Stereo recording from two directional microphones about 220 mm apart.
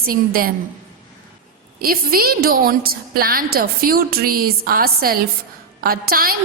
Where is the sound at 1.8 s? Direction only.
40° right (ahead or behind).